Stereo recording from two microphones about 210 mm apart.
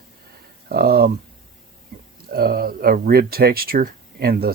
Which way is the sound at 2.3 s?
45° right (ahead or behind).